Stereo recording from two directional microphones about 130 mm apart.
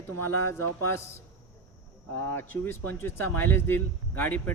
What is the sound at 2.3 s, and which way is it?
Speech, 15° left (ahead or behind).